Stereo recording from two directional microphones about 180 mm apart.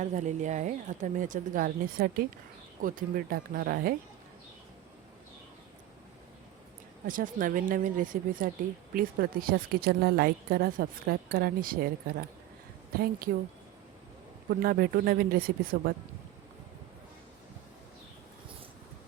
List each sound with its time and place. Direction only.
0.0 s speech: 40° right (ahead or behind)
7.1 s speech: 50° right (ahead or behind)
14.6 s speech: 55° right (ahead or behind)